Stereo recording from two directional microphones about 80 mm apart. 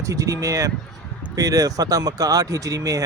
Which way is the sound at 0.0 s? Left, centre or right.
Right.